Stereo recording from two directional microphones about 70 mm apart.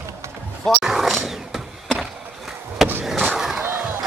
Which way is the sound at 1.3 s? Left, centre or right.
Centre.